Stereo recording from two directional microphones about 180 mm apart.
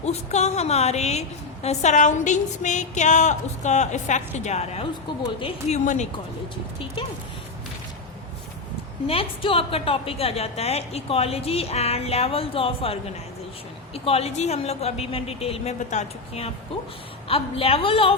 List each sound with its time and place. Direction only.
0.0 s a woman's voice: 40° left (ahead or behind)
9.0 s a woman's voice: 30° left (ahead or behind)